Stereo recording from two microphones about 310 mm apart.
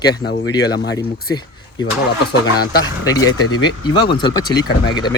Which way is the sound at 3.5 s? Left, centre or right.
Centre.